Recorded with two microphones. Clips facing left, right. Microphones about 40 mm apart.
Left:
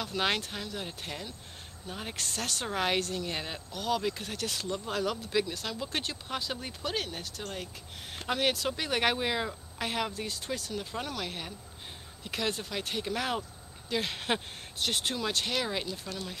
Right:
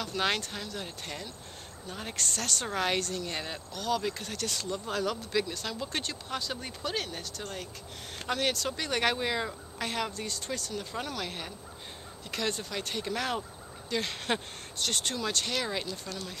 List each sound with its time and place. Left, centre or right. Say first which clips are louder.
0.0 s speech: even; centre